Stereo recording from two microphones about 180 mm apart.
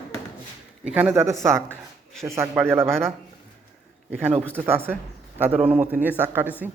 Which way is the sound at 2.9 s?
5° left (ahead or behind).